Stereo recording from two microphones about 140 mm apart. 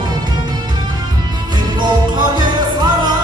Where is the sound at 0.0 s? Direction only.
30° right (ahead or behind).